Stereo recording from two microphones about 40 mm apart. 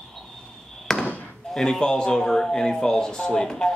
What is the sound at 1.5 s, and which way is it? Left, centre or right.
A man's voice, centre.